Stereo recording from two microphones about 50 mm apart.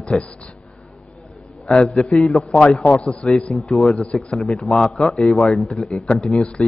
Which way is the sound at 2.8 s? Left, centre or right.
Left.